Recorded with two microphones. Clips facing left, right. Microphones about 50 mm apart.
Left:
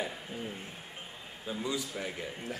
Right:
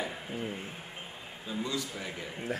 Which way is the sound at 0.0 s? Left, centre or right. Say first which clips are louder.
Right 1 dB; centre.